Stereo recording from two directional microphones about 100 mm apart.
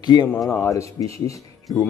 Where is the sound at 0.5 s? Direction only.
30° left (ahead or behind).